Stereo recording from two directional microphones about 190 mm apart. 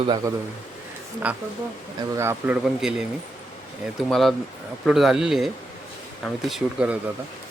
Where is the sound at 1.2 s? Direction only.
5° right (ahead or behind).